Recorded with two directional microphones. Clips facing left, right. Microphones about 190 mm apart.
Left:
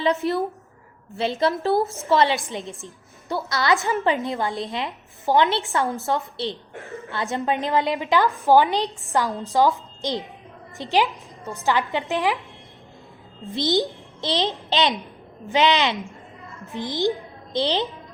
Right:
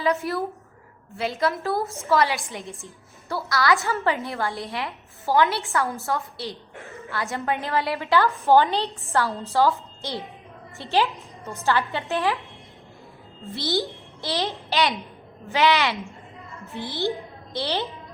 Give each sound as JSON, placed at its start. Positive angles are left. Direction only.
{"t": 0.0, "sound": "a woman's voice", "side_deg": 25}
{"t": 13.5, "sound": "a child's voice", "side_deg": 20}